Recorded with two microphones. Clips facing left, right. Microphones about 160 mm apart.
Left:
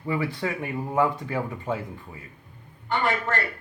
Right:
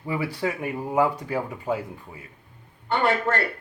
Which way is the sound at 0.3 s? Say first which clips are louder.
Right 2 dB; 10° right (ahead or behind).